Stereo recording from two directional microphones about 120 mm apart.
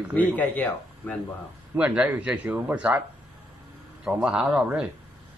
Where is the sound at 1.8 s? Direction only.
10° right (ahead or behind).